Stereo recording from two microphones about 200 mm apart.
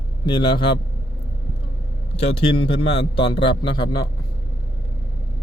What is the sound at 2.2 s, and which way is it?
A man's voice, 25° left (ahead or behind).